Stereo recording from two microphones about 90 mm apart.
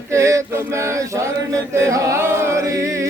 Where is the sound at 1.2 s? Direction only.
35° right (ahead or behind).